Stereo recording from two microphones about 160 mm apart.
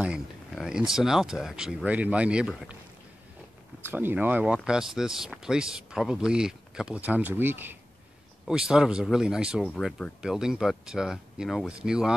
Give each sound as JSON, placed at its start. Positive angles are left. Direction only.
{"t": 0.0, "sound": "speech", "side_deg": -5}
{"t": 3.8, "sound": "speech", "side_deg": -10}